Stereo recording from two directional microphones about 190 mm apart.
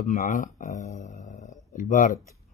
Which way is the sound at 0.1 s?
40° left (ahead or behind).